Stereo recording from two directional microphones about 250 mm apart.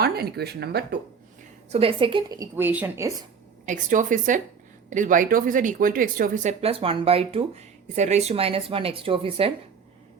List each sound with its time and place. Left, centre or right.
0.0 s speech: right
1.7 s a woman's voice: right
3.7 s speech: right